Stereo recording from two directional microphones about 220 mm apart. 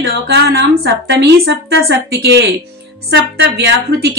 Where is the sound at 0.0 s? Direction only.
50° right (ahead or behind).